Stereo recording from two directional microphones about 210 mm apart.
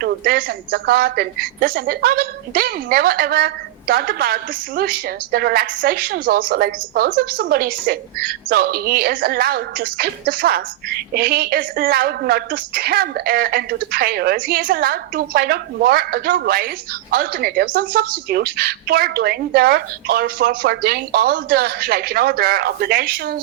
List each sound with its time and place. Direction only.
0.0 s a woman's voice: 45° right (ahead or behind)